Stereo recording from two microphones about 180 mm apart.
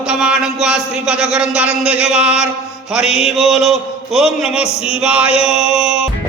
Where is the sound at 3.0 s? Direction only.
35° left (ahead or behind).